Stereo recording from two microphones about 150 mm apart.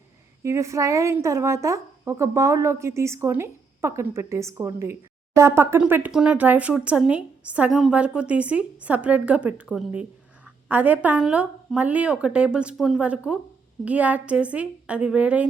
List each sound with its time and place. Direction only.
0.4 s a woman's voice: 20° right (ahead or behind)